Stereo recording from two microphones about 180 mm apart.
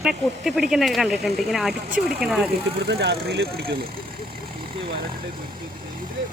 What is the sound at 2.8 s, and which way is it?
Speech, 70° right (ahead or behind).